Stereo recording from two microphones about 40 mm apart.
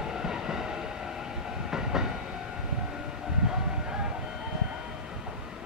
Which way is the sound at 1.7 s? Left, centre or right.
Centre.